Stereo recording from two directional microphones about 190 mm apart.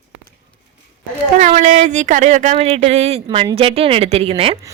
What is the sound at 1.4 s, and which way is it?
Speech, 40° right (ahead or behind).